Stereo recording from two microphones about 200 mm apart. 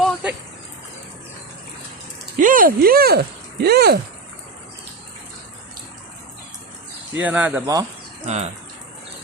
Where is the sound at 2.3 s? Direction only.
40° right (ahead or behind).